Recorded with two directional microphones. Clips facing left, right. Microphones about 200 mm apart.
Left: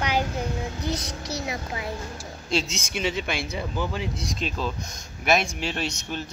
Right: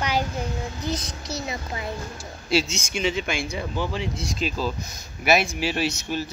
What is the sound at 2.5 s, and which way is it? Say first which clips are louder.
Speech: right 3 dB; centre (ahead or behind).